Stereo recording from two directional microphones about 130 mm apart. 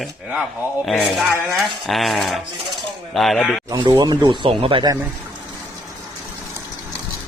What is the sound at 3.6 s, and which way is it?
Speech, 30° right (ahead or behind).